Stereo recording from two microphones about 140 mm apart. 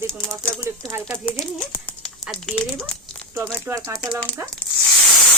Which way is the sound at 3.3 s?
15° right (ahead or behind).